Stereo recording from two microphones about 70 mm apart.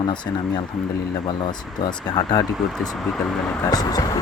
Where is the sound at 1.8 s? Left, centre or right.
Left.